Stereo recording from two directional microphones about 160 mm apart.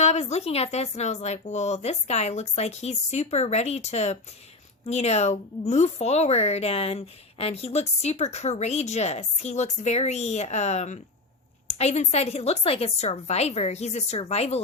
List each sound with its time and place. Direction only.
0.0 s a woman's voice: 45° left (ahead or behind)